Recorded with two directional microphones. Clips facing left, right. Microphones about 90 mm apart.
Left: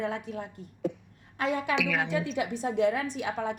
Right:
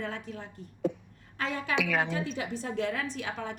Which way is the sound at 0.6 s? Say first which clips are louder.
Right 1 dB; 35° right (ahead or behind).